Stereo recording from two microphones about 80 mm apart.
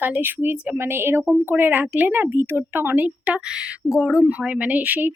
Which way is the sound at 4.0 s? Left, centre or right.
Centre.